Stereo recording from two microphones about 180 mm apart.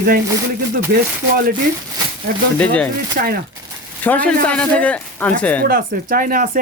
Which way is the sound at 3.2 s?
50° right (ahead or behind).